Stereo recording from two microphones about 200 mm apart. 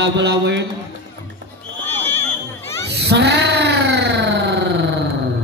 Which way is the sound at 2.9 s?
55° right (ahead or behind).